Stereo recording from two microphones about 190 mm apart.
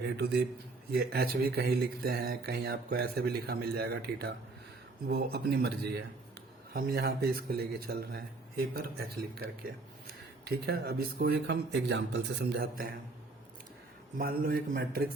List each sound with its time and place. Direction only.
0.0 s speech: 60° right (ahead or behind)
10.4 s speech: 55° right (ahead or behind)
14.2 s a man's voice: 50° right (ahead or behind)